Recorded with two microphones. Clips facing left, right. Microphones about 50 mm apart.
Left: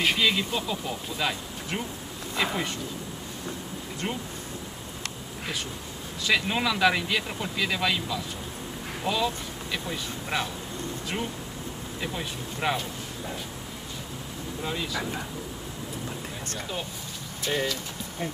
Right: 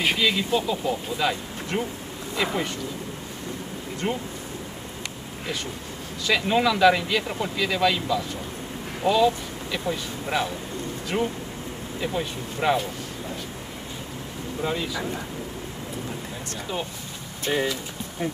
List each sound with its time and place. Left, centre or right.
0.2 s speech: centre
4.0 s speech: centre
6.2 s speech: centre
11.1 s speech: centre
14.6 s speech: centre
17.5 s speech: centre